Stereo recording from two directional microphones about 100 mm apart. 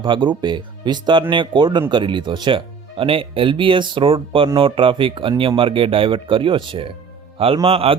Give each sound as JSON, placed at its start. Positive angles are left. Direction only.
{"t": 0.0, "sound": "speech", "side_deg": -55}
{"t": 3.0, "sound": "a man's voice", "side_deg": -65}